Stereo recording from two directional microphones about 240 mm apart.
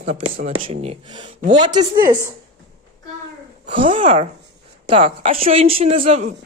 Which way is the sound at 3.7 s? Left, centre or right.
Right.